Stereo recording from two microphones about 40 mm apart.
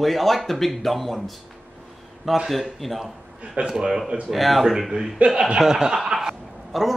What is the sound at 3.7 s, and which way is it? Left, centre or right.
Speech, centre.